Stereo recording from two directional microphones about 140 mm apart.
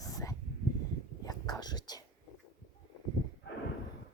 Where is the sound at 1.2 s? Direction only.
25° left (ahead or behind).